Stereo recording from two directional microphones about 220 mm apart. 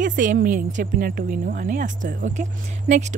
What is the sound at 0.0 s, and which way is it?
A woman's voice, 35° right (ahead or behind).